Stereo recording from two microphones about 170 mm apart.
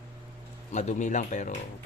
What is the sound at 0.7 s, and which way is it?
Speech, 45° left (ahead or behind).